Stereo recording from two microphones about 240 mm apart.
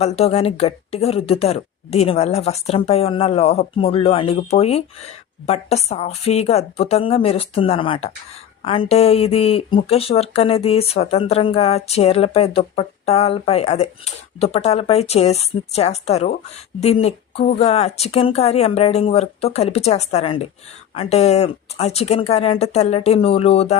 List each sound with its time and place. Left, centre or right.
0.0 s speech: left